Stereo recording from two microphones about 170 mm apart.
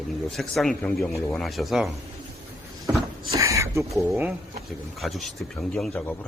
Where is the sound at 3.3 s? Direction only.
20° right (ahead or behind).